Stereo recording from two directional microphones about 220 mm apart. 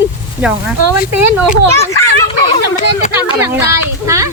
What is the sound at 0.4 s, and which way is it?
Speech, 5° right (ahead or behind).